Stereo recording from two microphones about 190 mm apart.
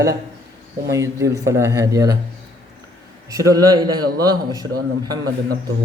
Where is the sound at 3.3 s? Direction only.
20° right (ahead or behind).